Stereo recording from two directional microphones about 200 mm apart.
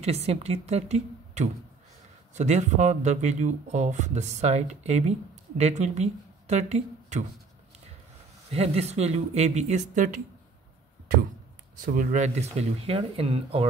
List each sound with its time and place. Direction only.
0.0 s speech: 30° right (ahead or behind)
8.5 s speech: 30° right (ahead or behind)
11.8 s speech: 40° right (ahead or behind)